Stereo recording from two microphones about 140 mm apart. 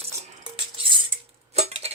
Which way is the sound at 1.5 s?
50° right (ahead or behind).